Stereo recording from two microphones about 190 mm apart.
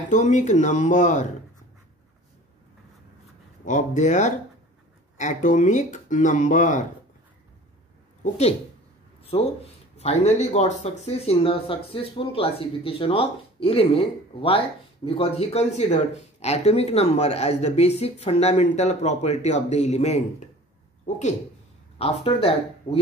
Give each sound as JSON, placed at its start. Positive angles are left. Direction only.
{"t": 0.1, "sound": "speech", "side_deg": 40}
{"t": 3.6, "sound": "speech", "side_deg": 40}
{"t": 8.2, "sound": "speech", "side_deg": 35}
{"t": 9.2, "sound": "a sound", "side_deg": 30}
{"t": 9.9, "sound": "speech", "side_deg": 35}